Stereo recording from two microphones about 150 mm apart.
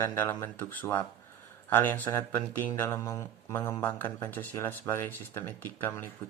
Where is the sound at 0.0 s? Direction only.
15° left (ahead or behind).